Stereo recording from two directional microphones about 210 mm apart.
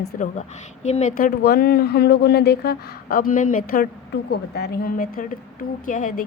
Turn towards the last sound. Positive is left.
turn(degrees=40)  # may be behind; listen again after turning